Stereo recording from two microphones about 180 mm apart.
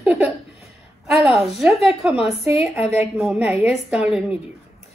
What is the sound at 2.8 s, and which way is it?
Speech, 35° left (ahead or behind).